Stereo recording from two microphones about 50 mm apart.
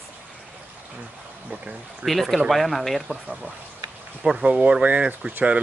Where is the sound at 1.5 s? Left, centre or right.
Right.